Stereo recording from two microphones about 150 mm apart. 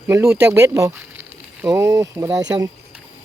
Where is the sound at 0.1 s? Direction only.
20° right (ahead or behind).